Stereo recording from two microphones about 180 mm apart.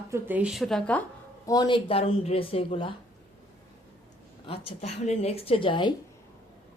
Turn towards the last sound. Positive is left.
turn(degrees=25)  # may be behind; listen again after turning